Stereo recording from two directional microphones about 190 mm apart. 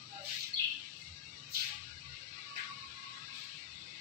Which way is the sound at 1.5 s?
55° right (ahead or behind).